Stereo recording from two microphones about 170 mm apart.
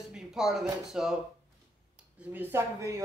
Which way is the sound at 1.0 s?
5° right (ahead or behind).